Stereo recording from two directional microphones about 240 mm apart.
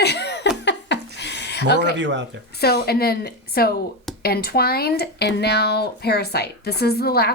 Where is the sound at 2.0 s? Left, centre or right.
Right.